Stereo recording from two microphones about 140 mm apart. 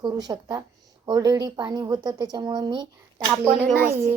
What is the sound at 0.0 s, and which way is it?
Speech, 30° right (ahead or behind).